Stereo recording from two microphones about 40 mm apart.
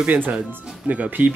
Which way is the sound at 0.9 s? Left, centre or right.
Right.